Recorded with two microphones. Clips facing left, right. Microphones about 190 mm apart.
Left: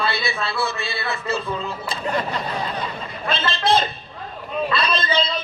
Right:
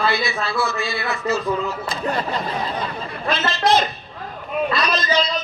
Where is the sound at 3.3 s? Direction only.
30° left (ahead or behind).